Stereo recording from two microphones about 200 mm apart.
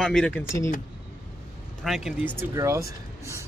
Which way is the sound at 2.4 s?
15° right (ahead or behind).